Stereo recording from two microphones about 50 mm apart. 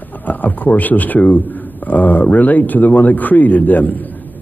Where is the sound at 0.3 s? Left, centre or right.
Left.